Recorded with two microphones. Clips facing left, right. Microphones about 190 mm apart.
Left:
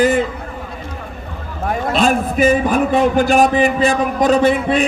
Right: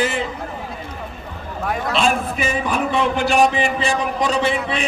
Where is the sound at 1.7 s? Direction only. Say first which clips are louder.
Left 4 dB; 45° left (ahead or behind).